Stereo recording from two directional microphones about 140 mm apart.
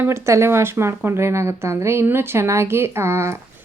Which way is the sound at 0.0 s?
20° right (ahead or behind).